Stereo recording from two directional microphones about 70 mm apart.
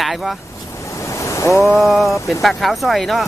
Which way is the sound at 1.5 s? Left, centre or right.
Centre.